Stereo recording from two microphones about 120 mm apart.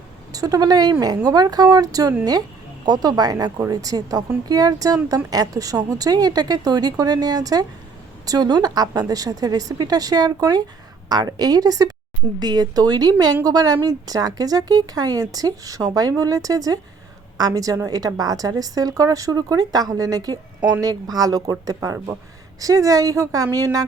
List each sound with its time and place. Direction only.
0.3 s a woman's voice: 30° right (ahead or behind)